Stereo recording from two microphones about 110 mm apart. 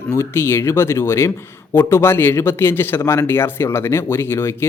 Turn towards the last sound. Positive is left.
turn(degrees=25)  # may be behind; listen again after turning